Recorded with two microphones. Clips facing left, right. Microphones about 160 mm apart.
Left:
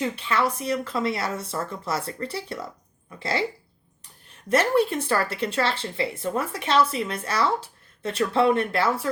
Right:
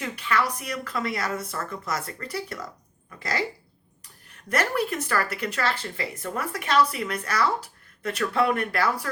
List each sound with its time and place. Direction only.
0.0 s speech: 25° left (ahead or behind)
4.4 s speech: 25° left (ahead or behind)